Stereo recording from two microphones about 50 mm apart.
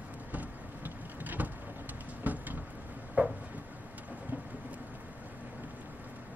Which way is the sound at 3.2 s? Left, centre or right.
Right.